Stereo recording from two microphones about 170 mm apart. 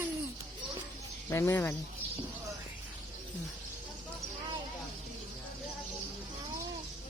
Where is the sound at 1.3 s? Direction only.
15° left (ahead or behind).